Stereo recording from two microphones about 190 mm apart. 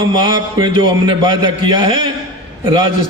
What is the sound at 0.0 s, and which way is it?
A man's voice, 25° right (ahead or behind).